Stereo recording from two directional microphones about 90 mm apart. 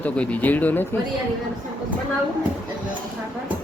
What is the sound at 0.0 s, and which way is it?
Speech, 15° left (ahead or behind).